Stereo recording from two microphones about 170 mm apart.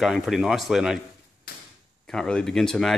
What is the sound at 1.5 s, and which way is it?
Arrow, 70° left (ahead or behind).